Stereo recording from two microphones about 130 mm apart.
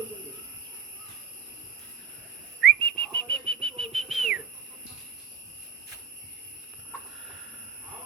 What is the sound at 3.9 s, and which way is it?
Whistle, centre (ahead or behind).